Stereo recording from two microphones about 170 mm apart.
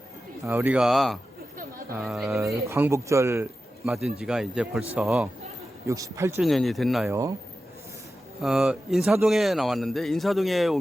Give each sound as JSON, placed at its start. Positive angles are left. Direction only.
{"t": 0.4, "sound": "a man's voice", "side_deg": -10}
{"t": 2.6, "sound": "speech", "side_deg": -15}
{"t": 3.8, "sound": "a man's voice", "side_deg": 0}
{"t": 5.9, "sound": "speech", "side_deg": -20}
{"t": 6.4, "sound": "a man's voice", "side_deg": 0}
{"t": 7.1, "sound": "speech", "side_deg": -20}
{"t": 8.4, "sound": "a man's voice", "side_deg": 0}